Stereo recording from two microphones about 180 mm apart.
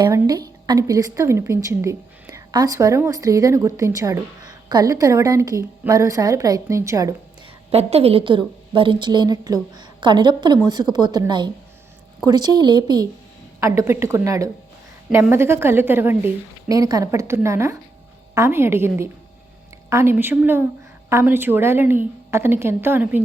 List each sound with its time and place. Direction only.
0.0 s a woman's voice: 20° right (ahead or behind)
7.7 s a woman's voice: 35° right (ahead or behind); by 23.2 s 10° right (ahead or behind)